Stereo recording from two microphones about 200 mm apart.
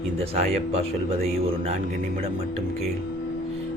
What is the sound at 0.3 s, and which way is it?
Speech, 30° right (ahead or behind).